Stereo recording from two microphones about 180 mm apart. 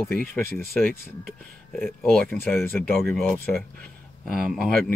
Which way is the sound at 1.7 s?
Centre (ahead or behind).